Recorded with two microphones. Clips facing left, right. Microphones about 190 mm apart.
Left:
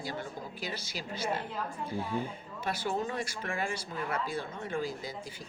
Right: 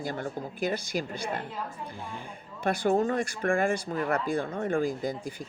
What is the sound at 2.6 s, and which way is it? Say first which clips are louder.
A woman's voice: right 8 dB; 50° right (ahead or behind).